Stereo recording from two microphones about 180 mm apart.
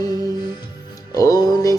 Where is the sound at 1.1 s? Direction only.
20° left (ahead or behind).